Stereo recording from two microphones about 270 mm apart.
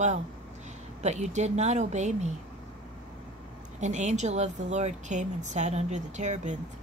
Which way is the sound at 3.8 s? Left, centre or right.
Right.